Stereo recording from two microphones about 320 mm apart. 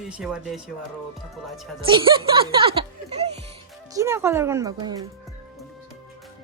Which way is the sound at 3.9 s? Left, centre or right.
Centre.